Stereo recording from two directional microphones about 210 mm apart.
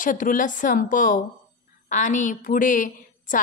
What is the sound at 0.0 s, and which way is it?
Speech, 40° left (ahead or behind).